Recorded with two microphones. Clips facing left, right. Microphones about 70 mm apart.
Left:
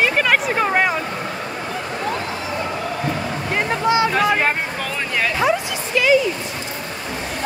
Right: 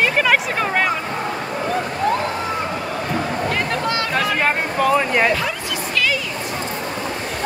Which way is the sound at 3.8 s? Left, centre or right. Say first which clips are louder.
Left 5 dB; centre.